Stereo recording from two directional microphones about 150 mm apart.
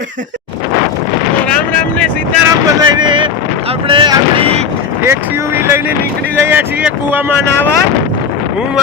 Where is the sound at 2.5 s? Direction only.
25° right (ahead or behind).